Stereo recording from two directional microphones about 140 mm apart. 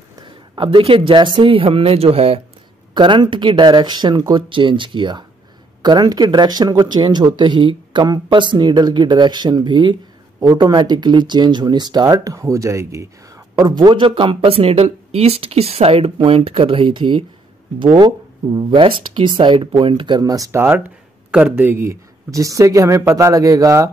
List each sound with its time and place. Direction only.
0.2 s speech: 35° right (ahead or behind); by 13.1 s 20° right (ahead or behind)
13.6 s speech: 30° right (ahead or behind)